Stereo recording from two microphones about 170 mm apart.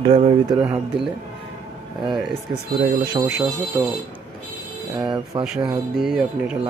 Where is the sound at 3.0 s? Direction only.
25° right (ahead or behind).